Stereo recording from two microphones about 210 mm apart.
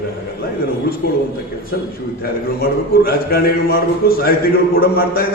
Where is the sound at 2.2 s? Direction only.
45° left (ahead or behind).